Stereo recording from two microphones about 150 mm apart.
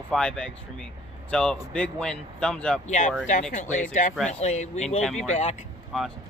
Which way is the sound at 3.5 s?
55° left (ahead or behind).